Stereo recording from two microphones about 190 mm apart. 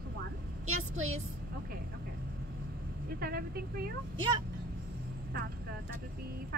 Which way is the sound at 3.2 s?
55° right (ahead or behind).